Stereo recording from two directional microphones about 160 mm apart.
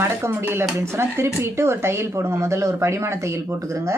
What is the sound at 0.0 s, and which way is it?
Speech, 15° right (ahead or behind).